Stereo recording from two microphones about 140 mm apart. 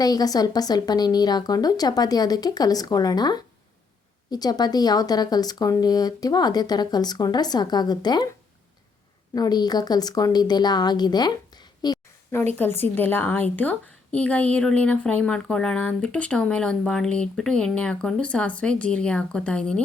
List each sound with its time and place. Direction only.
0.0 s speech: 30° left (ahead or behind)
9.3 s speech: 30° left (ahead or behind)
12.5 s a woman's voice: 15° left (ahead or behind)